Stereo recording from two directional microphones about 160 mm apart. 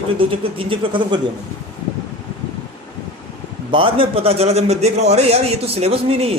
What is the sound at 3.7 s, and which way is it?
A man's voice, 35° right (ahead or behind).